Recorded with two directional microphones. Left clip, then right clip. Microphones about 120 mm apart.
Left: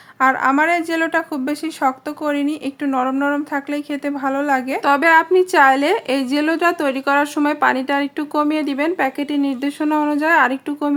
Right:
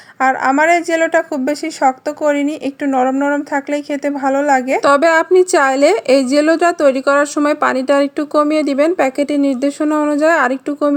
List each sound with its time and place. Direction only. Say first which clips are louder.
0.2 s a woman's voice: right 2 dB; 25° right (ahead or behind)